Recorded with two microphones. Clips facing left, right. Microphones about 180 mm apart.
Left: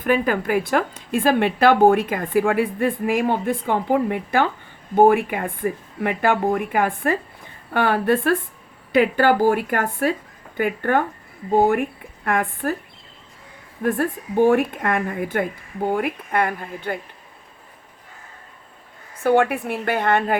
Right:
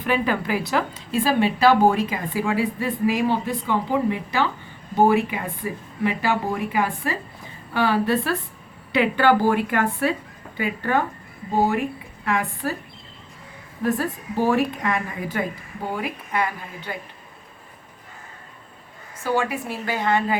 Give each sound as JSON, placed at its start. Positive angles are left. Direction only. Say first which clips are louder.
{"t": 0.0, "sound": "a woman's voice", "louder": "left 3 dB", "side_deg": 50}
{"t": 13.8, "sound": "a woman's voice", "louder": "left 2 dB", "side_deg": 55}
{"t": 19.2, "sound": "speech", "louder": "left 6 dB", "side_deg": 60}